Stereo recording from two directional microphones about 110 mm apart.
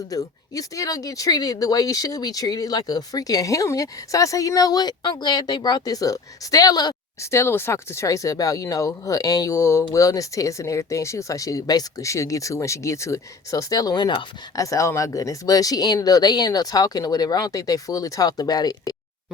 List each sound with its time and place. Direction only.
0.1 s speech: 30° left (ahead or behind)
7.2 s speech: 25° left (ahead or behind)